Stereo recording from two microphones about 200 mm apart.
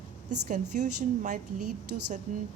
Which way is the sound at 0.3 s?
40° right (ahead or behind).